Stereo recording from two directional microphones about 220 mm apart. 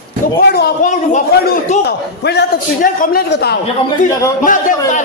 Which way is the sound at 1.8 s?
50° left (ahead or behind).